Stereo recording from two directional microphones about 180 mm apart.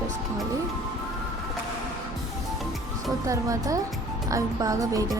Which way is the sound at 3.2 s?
20° right (ahead or behind).